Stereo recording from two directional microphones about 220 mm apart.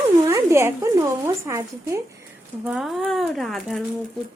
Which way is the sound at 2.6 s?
Centre (ahead or behind).